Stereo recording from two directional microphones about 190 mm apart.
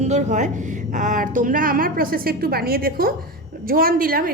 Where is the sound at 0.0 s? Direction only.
40° right (ahead or behind).